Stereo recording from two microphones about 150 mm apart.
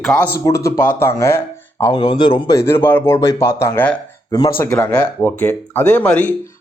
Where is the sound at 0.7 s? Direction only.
15° left (ahead or behind).